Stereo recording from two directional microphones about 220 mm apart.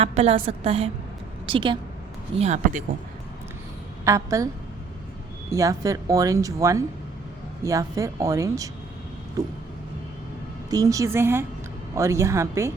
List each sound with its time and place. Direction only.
0.0 s a woman's voice: 30° right (ahead or behind)
4.0 s speech: 15° right (ahead or behind)
5.5 s speech: 15° right (ahead or behind)
10.7 s speech: 15° right (ahead or behind)